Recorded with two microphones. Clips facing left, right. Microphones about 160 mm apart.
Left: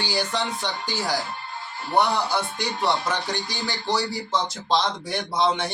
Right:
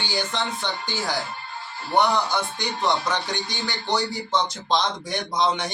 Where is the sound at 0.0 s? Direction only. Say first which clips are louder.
Left 1 dB; 10° left (ahead or behind).